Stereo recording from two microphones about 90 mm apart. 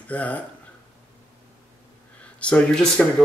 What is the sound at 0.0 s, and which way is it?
Speech, 15° left (ahead or behind).